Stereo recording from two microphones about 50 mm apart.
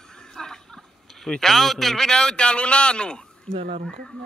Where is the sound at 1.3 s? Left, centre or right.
Centre.